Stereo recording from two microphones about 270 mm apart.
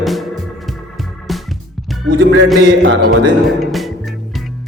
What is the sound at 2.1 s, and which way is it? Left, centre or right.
Music, right.